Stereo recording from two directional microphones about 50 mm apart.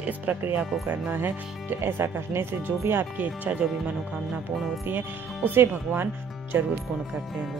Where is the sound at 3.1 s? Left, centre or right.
Right.